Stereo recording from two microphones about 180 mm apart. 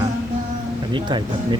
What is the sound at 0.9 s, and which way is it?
Speech, 25° right (ahead or behind).